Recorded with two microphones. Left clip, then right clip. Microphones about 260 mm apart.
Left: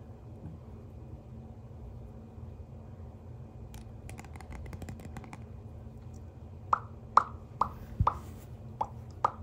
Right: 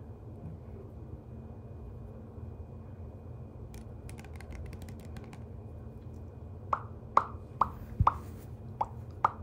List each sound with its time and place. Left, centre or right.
6.7 s plop: centre